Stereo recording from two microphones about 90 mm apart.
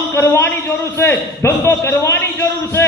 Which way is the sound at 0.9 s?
25° left (ahead or behind).